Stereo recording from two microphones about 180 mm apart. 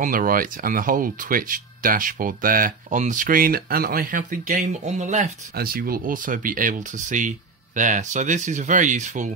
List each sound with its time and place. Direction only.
0.0 s speech: 50° right (ahead or behind)